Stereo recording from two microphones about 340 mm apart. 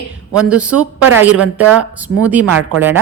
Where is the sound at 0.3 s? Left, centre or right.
Centre.